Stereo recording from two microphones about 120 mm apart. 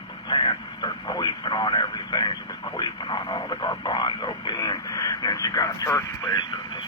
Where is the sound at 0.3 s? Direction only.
40° left (ahead or behind).